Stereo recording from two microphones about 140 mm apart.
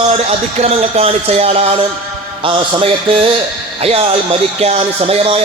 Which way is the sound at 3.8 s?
45° right (ahead or behind).